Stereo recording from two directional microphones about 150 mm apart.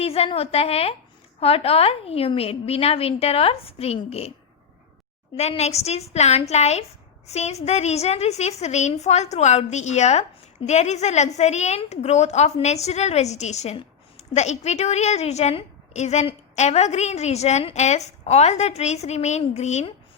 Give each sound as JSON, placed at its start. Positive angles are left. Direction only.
{"t": 0.0, "sound": "a woman's voice", "side_deg": 40}
{"t": 5.4, "sound": "a woman's voice", "side_deg": 45}